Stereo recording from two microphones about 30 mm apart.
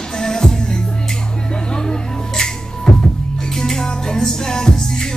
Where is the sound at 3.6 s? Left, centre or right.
Centre.